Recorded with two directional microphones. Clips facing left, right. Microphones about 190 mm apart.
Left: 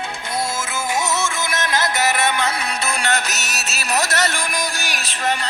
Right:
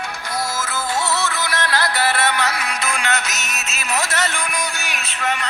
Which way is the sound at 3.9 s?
40° left (ahead or behind).